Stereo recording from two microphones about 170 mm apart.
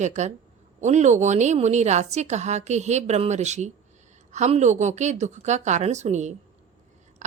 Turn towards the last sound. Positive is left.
turn(degrees=-45)  # may be behind; listen again after turning